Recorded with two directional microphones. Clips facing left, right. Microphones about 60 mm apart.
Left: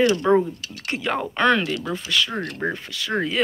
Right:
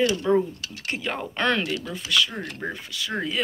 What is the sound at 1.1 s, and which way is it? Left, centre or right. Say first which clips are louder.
Speech: left 6 dB; centre.